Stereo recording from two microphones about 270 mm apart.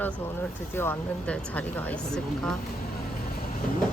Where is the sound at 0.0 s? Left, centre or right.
Centre.